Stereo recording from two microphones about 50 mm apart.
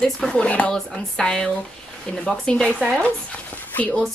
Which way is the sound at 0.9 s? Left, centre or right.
Centre.